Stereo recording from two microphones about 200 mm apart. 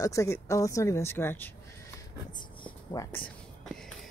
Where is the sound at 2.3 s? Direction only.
20° left (ahead or behind).